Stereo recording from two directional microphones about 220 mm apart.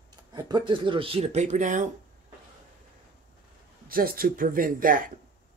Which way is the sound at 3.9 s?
40° right (ahead or behind).